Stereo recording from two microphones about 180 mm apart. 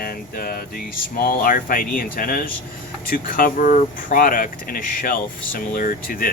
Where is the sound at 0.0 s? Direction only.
55° left (ahead or behind).